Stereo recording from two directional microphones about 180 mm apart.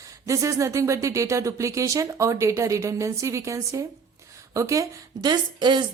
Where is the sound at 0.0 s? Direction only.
15° right (ahead or behind).